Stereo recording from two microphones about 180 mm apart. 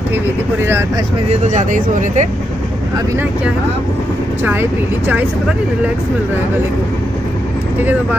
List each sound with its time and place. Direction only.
1.4 s speech: 45° right (ahead or behind)
4.5 s speech: 10° right (ahead or behind)